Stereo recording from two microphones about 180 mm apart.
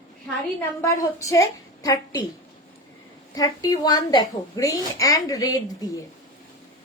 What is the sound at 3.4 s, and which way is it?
A woman's voice, 20° left (ahead or behind).